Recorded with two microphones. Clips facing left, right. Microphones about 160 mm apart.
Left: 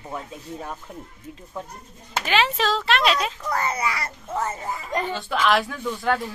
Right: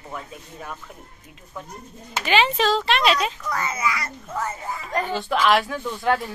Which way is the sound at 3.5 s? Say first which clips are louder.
Left 4 dB; 35° left (ahead or behind).